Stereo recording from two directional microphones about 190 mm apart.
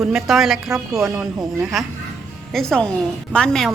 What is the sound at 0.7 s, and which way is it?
Speech, 15° right (ahead or behind).